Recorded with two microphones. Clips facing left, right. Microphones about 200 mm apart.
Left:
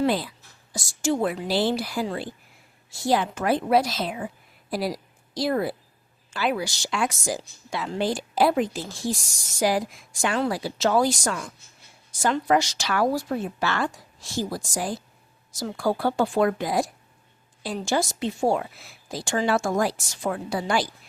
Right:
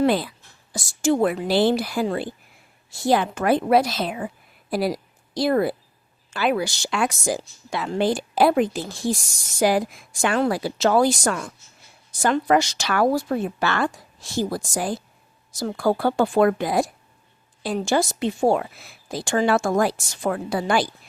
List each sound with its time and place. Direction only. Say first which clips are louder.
0.0 s a woman's voice: right 3 dB; 60° right (ahead or behind)